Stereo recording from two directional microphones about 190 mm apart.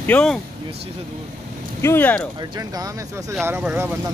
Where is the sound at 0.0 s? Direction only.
5° left (ahead or behind).